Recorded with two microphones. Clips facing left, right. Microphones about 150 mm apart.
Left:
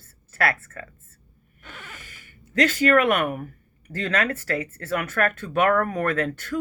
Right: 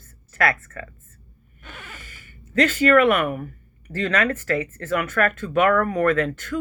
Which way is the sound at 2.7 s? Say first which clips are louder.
Right 3 dB; 40° left (ahead or behind).